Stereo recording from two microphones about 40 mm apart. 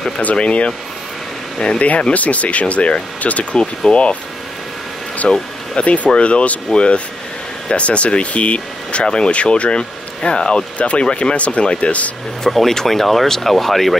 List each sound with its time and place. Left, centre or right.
0.2 s speech: left
1.8 s speech: left
5.2 s speech: left
11.1 s speech: left
11.3 s speech: left
12.4 s speech: centre